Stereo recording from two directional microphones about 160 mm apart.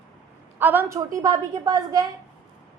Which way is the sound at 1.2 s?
20° right (ahead or behind).